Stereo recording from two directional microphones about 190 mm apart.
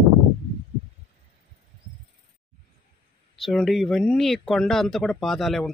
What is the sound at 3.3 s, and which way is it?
Speech, centre (ahead or behind).